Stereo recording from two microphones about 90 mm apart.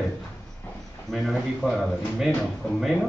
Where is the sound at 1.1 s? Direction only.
5° left (ahead or behind).